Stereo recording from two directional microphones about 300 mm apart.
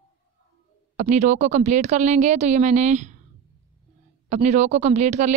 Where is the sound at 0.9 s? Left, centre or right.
Right.